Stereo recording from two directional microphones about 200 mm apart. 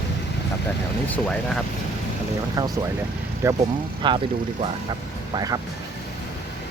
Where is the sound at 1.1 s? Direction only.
5° left (ahead or behind).